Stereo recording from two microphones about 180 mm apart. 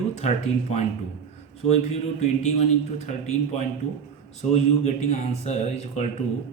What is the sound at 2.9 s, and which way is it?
Speech, 40° left (ahead or behind).